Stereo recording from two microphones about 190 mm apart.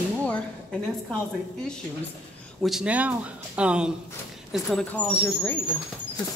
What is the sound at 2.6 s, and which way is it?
Speech, 5° right (ahead or behind).